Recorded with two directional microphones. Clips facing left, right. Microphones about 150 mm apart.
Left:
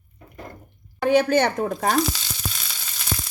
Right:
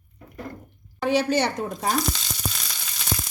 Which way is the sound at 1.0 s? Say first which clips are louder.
Left 4 dB; 50° left (ahead or behind).